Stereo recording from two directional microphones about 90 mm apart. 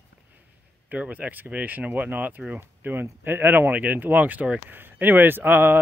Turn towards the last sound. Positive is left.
turn(degrees=-25)  # may be behind; listen again after turning